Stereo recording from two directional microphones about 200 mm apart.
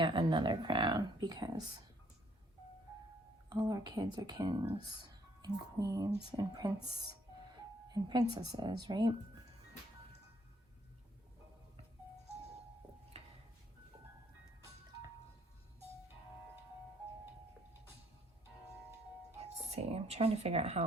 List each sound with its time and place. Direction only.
0.0 s speech: 25° right (ahead or behind)
3.5 s speech: 20° right (ahead or behind)
7.9 s speech: 20° right (ahead or behind)
19.4 s speech: 30° right (ahead or behind)